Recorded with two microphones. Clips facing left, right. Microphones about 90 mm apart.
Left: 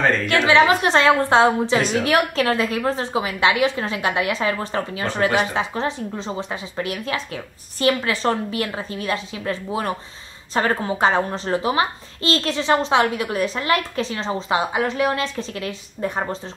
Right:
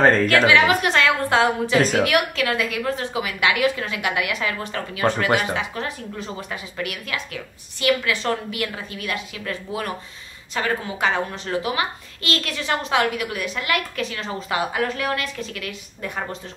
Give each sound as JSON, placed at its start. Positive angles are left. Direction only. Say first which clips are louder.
{"t": 0.0, "sound": "a woman's voice", "louder": "right 3 dB", "side_deg": -40}
{"t": 0.5, "sound": "a woman's voice", "louder": "left 2 dB", "side_deg": 30}